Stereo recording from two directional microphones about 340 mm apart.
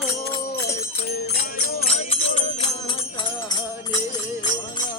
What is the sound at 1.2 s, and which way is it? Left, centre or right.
Music, left.